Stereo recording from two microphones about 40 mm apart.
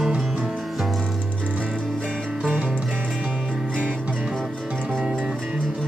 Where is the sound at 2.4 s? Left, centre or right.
Right.